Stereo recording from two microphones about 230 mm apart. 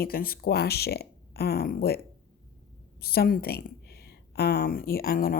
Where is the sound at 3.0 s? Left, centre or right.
Left.